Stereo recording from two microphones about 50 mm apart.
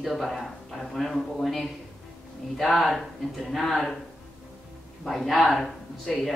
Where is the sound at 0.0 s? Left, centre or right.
Centre.